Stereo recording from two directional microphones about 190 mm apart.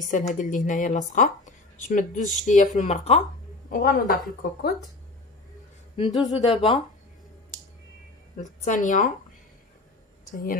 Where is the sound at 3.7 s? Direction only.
50° left (ahead or behind).